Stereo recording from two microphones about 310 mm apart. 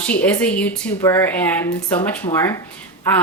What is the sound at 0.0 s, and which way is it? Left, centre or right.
Speech, centre.